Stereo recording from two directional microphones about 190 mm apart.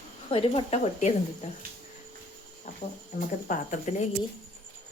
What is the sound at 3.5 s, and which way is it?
Speech, 40° left (ahead or behind).